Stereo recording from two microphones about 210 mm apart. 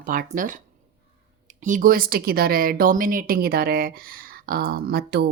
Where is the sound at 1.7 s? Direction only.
40° right (ahead or behind).